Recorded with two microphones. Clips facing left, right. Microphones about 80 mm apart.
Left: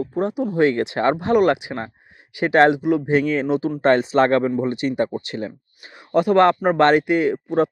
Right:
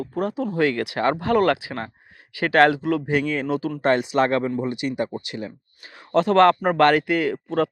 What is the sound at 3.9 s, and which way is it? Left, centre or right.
Speech, left.